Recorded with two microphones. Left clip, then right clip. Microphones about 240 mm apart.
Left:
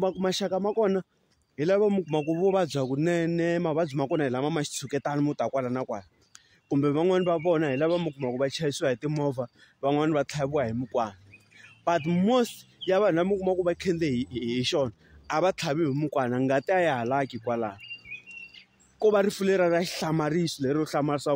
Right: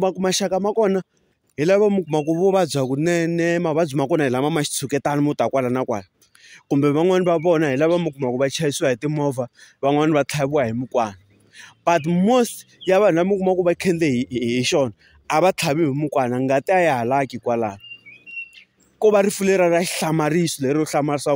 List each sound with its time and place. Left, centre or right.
0.0 s a man's voice: right
18.9 s a man's voice: right